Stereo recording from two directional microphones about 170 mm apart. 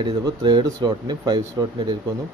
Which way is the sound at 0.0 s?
25° right (ahead or behind).